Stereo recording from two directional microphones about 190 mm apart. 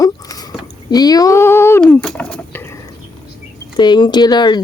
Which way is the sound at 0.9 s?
20° left (ahead or behind).